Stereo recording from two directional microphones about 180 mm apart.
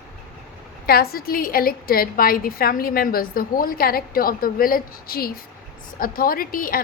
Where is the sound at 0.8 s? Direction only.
60° left (ahead or behind).